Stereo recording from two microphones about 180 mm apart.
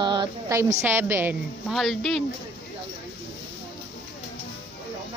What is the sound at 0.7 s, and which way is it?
Speech, 15° right (ahead or behind).